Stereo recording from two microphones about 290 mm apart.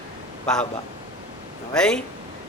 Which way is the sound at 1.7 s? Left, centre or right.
Centre.